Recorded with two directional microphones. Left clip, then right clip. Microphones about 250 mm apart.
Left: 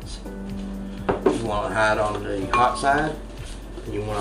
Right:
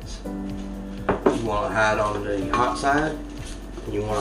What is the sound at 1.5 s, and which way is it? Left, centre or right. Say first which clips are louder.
Speech: even; centre.